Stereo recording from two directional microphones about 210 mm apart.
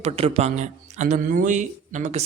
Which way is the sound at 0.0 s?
30° right (ahead or behind).